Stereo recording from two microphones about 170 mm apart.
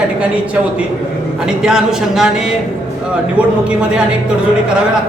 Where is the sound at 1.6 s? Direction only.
5° right (ahead or behind).